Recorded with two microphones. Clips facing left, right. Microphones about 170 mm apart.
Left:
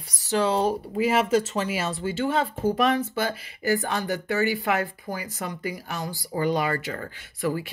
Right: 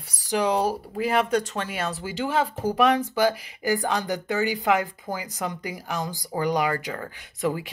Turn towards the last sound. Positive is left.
turn(degrees=-15)  # may be behind; listen again after turning